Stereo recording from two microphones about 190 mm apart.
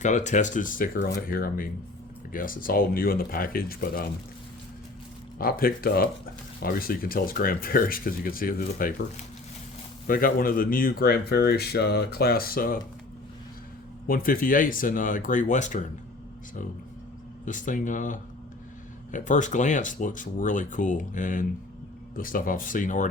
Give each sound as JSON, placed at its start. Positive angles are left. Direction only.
{"t": 0.0, "sound": "speech", "side_deg": 40}
{"t": 5.4, "sound": "speech", "side_deg": 50}
{"t": 14.1, "sound": "speech", "side_deg": 50}
{"t": 17.4, "sound": "speech", "side_deg": 40}